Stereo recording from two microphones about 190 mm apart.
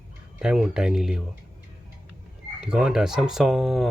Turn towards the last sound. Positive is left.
turn(degrees=0)  # may be behind; listen again after turning